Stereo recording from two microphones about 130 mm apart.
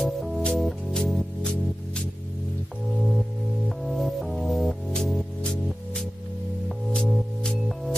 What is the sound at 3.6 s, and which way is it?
Music, centre (ahead or behind).